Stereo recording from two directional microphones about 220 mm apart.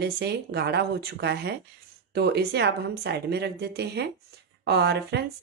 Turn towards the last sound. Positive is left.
turn(degrees=-50)  # may be behind; listen again after turning